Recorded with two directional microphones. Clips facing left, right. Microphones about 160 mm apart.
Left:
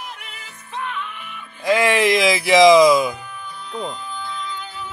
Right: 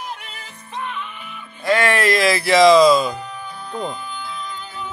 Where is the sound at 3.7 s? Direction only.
5° right (ahead or behind).